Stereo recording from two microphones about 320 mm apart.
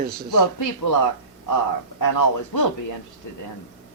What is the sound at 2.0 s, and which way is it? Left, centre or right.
Speech, left.